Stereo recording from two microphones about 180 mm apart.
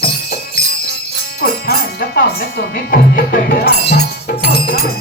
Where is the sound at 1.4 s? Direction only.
60° left (ahead or behind).